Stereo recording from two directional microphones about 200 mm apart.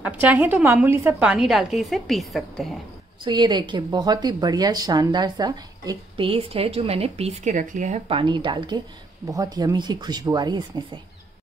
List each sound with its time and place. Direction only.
0.0 s a woman's voice: 10° right (ahead or behind)
3.3 s a woman's voice: 20° right (ahead or behind)